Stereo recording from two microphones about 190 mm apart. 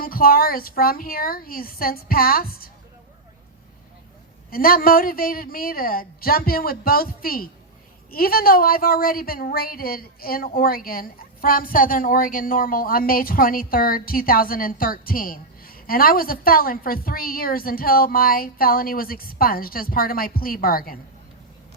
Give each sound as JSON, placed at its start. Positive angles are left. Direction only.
{"t": 0.0, "sound": "speech", "side_deg": 50}
{"t": 4.5, "sound": "speech", "side_deg": 50}